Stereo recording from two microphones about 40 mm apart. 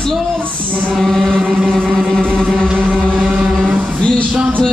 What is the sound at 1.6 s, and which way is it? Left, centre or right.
Vehicle, centre.